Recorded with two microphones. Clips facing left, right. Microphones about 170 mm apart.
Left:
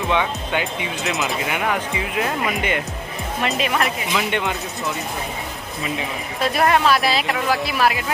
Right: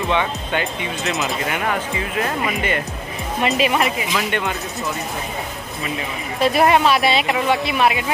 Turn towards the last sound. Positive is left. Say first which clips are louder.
# right 2 dB
turn(degrees=0)  # may be behind; listen again after turning